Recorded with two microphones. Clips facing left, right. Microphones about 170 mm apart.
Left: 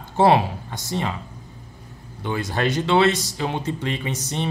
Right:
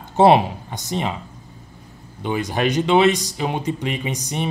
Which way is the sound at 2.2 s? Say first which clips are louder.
Right 2 dB; 15° right (ahead or behind).